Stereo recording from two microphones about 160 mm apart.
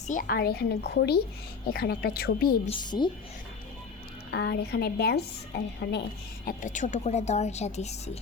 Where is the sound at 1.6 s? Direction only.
70° left (ahead or behind).